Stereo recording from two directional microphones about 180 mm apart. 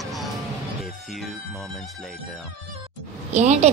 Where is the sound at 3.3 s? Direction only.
40° right (ahead or behind).